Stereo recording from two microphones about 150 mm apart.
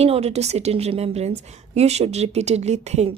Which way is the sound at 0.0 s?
45° right (ahead or behind).